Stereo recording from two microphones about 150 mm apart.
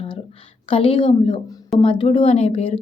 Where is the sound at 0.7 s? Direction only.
40° left (ahead or behind).